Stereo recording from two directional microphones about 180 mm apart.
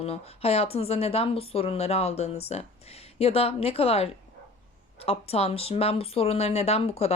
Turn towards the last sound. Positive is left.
turn(degrees=35)  # may be behind; listen again after turning